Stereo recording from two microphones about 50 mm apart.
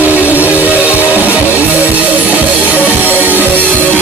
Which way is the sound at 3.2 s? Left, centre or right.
Right.